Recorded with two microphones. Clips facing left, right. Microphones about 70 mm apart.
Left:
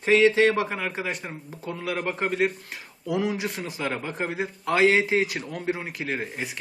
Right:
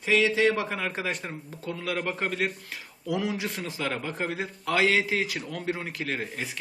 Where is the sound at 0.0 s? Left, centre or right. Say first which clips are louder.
Left 4 dB; left.